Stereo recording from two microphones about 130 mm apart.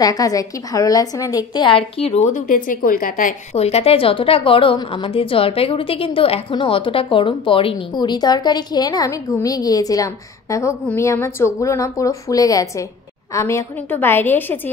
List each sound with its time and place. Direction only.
0.0 s a woman's voice: 30° left (ahead or behind); by 2.1 s 45° left (ahead or behind)
2.2 s a woman's voice: 80° left
3.5 s a woman's voice: 55° left (ahead or behind); by 14.6 s 15° left (ahead or behind)